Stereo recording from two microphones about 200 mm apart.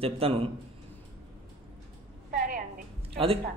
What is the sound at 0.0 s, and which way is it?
Speech, 30° right (ahead or behind).